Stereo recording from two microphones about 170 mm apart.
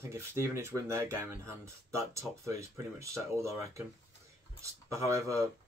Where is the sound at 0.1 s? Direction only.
15° right (ahead or behind).